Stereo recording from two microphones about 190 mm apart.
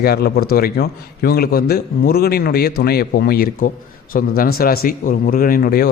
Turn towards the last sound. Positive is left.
turn(degrees=50)  # may be behind; listen again after turning